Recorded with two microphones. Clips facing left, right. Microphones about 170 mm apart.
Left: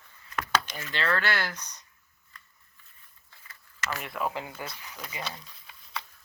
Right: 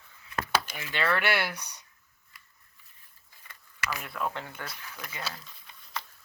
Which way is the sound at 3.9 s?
5° left (ahead or behind).